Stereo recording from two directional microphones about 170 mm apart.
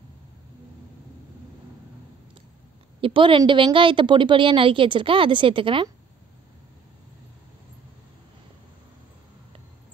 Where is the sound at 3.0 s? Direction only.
30° right (ahead or behind).